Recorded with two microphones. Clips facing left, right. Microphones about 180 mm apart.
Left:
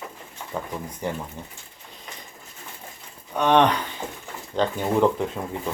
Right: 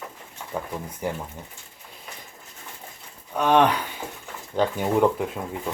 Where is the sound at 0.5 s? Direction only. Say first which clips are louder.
Even; 10° right (ahead or behind).